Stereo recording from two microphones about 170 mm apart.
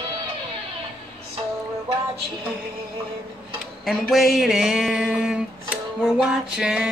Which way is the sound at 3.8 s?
Centre (ahead or behind).